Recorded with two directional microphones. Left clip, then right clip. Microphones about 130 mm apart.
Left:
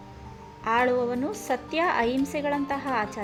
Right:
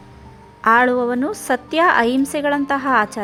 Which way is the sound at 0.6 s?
35° right (ahead or behind).